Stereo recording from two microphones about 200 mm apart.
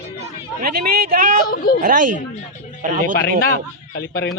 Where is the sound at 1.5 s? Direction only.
50° left (ahead or behind).